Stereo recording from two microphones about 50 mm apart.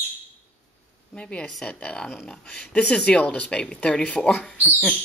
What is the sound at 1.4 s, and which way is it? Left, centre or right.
Speech, centre.